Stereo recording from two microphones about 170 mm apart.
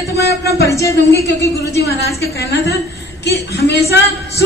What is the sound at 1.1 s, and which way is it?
Speech, 80° left.